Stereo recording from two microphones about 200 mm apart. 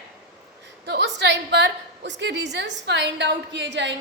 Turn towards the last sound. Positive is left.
turn(degrees=-65)  # may be behind; listen again after turning